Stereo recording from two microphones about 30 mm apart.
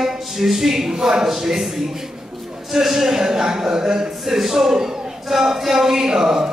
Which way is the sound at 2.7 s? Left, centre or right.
Centre.